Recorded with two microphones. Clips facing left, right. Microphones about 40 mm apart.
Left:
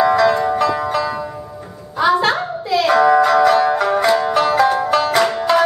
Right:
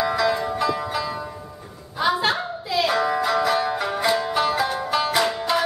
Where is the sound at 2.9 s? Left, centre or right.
Centre.